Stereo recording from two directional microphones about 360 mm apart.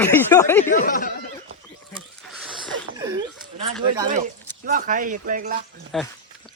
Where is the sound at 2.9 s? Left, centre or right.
Centre.